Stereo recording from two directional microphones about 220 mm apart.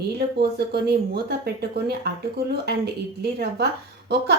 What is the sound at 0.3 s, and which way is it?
Speech, 45° right (ahead or behind).